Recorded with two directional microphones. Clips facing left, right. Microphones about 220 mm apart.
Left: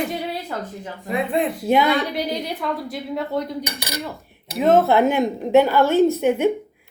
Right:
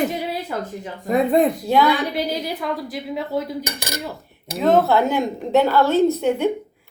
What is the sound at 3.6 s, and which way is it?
Cutlery, 45° right (ahead or behind).